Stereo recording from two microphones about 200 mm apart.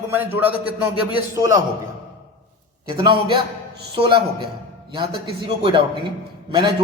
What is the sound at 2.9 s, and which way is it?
A man's voice, 20° right (ahead or behind).